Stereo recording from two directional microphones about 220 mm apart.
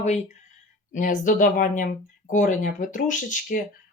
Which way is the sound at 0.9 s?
35° left (ahead or behind).